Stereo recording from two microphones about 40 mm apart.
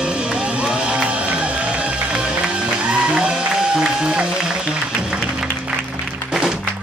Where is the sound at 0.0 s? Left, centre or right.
Right.